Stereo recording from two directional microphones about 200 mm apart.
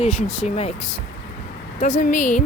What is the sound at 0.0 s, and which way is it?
Speech, 35° left (ahead or behind).